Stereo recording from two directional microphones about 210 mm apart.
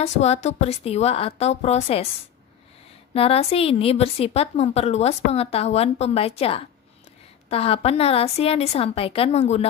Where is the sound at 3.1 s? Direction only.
30° left (ahead or behind).